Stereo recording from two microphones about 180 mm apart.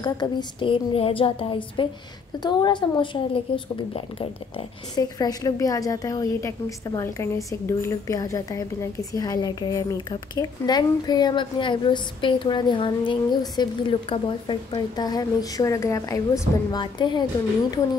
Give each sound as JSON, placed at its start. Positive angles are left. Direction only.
{"t": 0.0, "sound": "a woman's voice", "side_deg": 25}